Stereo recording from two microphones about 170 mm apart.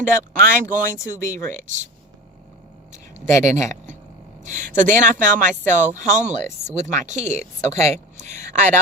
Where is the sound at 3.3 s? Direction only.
45° right (ahead or behind).